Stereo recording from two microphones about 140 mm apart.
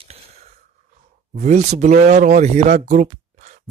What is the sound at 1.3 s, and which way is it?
Speech, 60° right (ahead or behind).